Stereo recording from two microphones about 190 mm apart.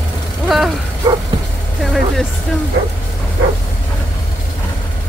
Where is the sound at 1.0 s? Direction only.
25° right (ahead or behind).